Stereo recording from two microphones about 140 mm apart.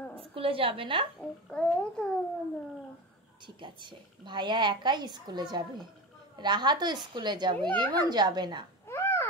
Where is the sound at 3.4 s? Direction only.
35° right (ahead or behind).